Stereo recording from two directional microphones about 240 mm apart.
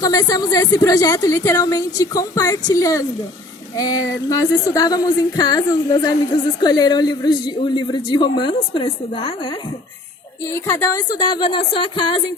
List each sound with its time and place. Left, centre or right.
0.0 s music: centre
10.4 s speech: centre